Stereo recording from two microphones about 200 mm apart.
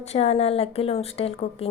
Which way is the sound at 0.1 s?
30° left (ahead or behind).